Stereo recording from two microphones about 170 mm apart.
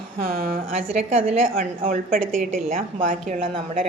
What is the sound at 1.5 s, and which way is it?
A woman's voice, 55° right (ahead or behind).